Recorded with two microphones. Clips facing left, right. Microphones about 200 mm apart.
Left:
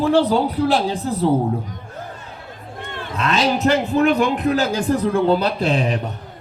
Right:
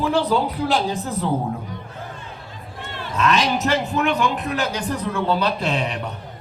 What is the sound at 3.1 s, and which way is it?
A man's voice, 35° left (ahead or behind).